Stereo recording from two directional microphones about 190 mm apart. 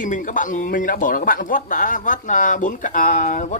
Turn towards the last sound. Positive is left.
turn(degrees=40)  # may be behind; listen again after turning